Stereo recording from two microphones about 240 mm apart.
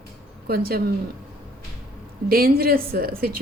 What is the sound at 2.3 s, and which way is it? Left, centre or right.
A woman's voice, right.